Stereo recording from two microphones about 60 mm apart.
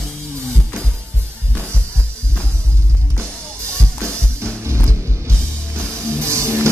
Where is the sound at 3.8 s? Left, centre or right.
Centre.